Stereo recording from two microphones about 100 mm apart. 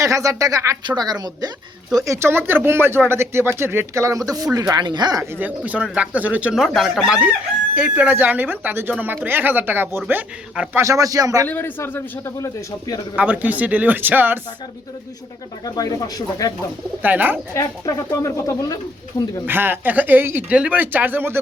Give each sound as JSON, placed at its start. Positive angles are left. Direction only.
{"t": 0.0, "sound": "speech", "side_deg": -35}
{"t": 4.7, "sound": "speech", "side_deg": -50}
{"t": 5.2, "sound": "speech", "side_deg": -15}
{"t": 6.6, "sound": "speech", "side_deg": 0}
{"t": 10.8, "sound": "speech", "side_deg": -35}
{"t": 11.4, "sound": "a man's voice", "side_deg": 20}
{"t": 13.1, "sound": "speech", "side_deg": -15}
{"t": 15.6, "sound": "speech", "side_deg": 40}
{"t": 17.0, "sound": "speech", "side_deg": -15}
{"t": 17.5, "sound": "speech", "side_deg": 30}
{"t": 19.5, "sound": "speech", "side_deg": -20}